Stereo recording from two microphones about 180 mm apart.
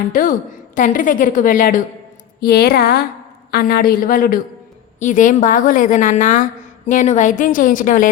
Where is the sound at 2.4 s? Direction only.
60° left (ahead or behind).